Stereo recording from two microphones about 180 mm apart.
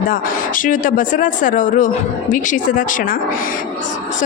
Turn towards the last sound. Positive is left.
turn(degrees=50)  # may be behind; listen again after turning